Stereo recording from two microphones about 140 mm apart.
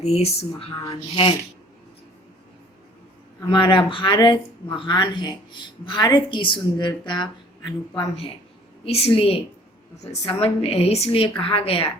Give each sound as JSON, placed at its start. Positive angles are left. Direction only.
{"t": 0.0, "sound": "a woman's voice", "side_deg": 45}
{"t": 3.5, "sound": "a woman's voice", "side_deg": 35}